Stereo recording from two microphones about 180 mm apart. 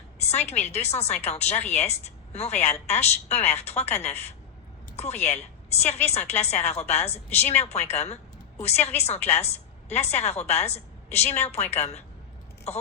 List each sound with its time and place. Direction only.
0.2 s a woman's voice: 35° left (ahead or behind)